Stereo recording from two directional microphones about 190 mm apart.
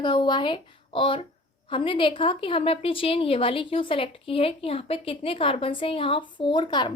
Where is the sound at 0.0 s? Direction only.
25° left (ahead or behind).